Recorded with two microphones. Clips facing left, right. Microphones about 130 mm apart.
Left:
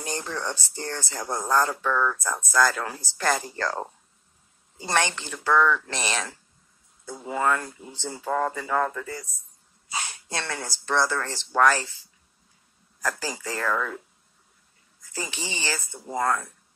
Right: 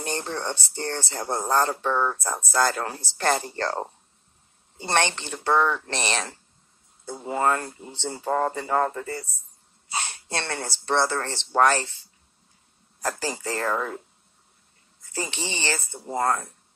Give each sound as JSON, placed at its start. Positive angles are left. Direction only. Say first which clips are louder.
{"t": 0.1, "sound": "speech", "louder": "right 1 dB", "side_deg": -30}
{"t": 13.0, "sound": "speech", "louder": "right 2 dB", "side_deg": -30}